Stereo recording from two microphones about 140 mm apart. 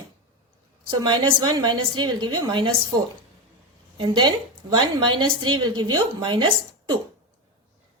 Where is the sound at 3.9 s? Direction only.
35° right (ahead or behind).